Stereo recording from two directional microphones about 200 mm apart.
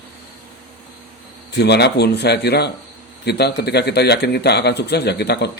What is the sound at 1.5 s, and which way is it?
Speech, 55° left (ahead or behind).